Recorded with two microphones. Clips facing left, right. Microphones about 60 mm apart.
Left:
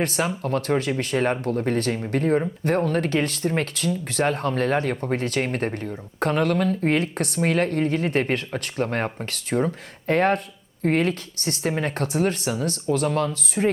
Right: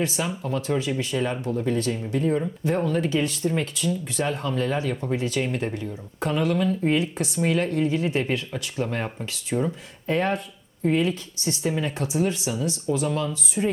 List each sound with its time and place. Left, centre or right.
0.0 s speech: left